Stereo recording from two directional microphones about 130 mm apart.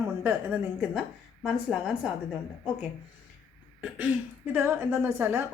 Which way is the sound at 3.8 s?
10° right (ahead or behind).